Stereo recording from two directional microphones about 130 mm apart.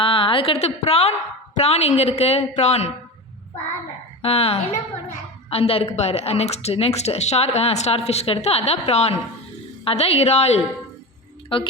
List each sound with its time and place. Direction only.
0.0 s a woman's voice: 40° left (ahead or behind); by 2.9 s 60° left (ahead or behind)
4.2 s a woman's voice: 50° left (ahead or behind)
11.4 s speech: 40° left (ahead or behind)